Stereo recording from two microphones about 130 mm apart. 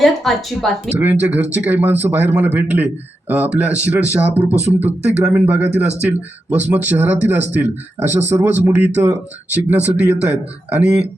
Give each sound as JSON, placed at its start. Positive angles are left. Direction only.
{"t": 0.0, "sound": "speech", "side_deg": 0}
{"t": 0.9, "sound": "speech", "side_deg": -10}